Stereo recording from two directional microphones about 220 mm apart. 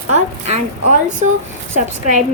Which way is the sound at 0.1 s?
30° right (ahead or behind).